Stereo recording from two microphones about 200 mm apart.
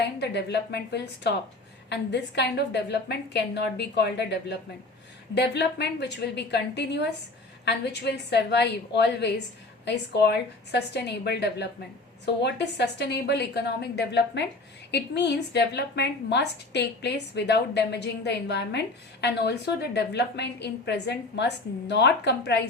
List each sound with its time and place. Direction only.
0.0 s a woman's voice: 55° left (ahead or behind)